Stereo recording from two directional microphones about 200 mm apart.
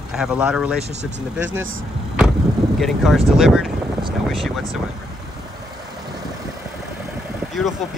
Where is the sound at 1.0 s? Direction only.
65° right (ahead or behind).